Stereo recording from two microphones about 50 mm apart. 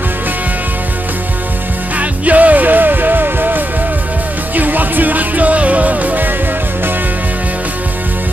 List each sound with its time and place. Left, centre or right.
2.0 s music: right